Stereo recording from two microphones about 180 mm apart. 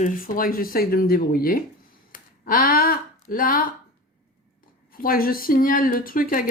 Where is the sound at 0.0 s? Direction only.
50° left (ahead or behind).